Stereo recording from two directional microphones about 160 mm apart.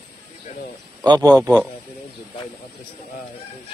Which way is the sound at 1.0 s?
25° right (ahead or behind).